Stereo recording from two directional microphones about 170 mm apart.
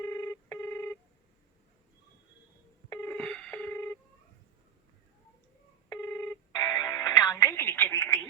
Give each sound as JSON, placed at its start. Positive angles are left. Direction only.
{"t": 0.0, "sound": "telephone", "side_deg": 20}
{"t": 3.1, "sound": "telephone dialing", "side_deg": 5}
{"t": 5.9, "sound": "music", "side_deg": 20}